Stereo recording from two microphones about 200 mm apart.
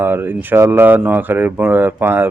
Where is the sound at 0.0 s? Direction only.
10° right (ahead or behind).